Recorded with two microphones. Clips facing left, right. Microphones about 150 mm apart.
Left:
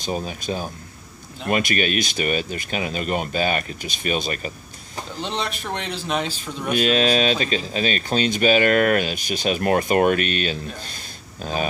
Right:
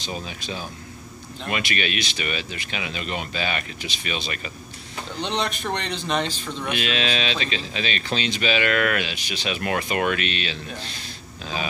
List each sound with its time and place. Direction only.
0.0 s speech: 45° left (ahead or behind)
5.1 s speech: centre (ahead or behind)
6.7 s speech: 40° left (ahead or behind)